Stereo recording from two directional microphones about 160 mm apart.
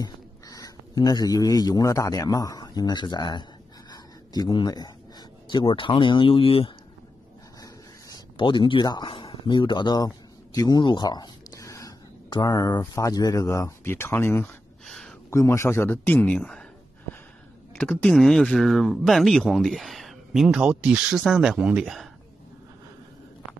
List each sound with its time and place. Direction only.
0.0 s a man's voice: 25° left (ahead or behind)
3.9 s a sound: 25° left (ahead or behind)
5.5 s speech: 30° left (ahead or behind)
8.4 s speech: 30° left (ahead or behind); by 14.5 s 15° left (ahead or behind)
14.9 s a sound: centre (ahead or behind)
15.2 s a man's voice: 15° left (ahead or behind)
17.7 s speech: 5° left (ahead or behind)